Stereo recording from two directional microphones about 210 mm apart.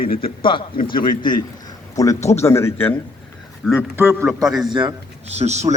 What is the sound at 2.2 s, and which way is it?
Speech, 30° left (ahead or behind).